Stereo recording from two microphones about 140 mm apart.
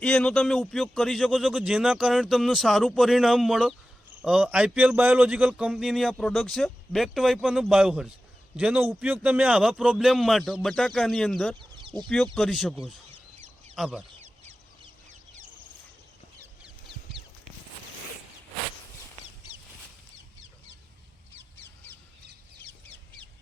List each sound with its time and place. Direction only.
0.0 s a man's voice: 5° left (ahead or behind)
11.6 s a sound: 35° right (ahead or behind)
12.0 s a man's voice: 5° left (ahead or behind)